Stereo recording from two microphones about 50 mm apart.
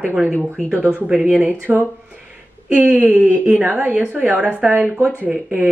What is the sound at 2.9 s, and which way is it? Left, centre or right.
Speech, right.